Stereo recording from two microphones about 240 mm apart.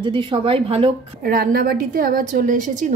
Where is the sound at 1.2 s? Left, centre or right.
Right.